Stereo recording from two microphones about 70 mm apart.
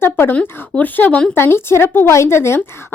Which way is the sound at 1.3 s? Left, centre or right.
Left.